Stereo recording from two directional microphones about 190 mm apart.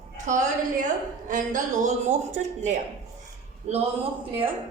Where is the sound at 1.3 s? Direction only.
45° right (ahead or behind).